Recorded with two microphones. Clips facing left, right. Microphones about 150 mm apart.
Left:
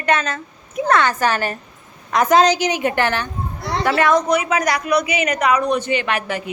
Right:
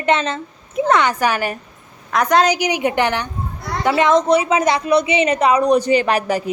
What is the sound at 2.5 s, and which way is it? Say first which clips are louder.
A woman's voice: right 1 dB; 15° right (ahead or behind).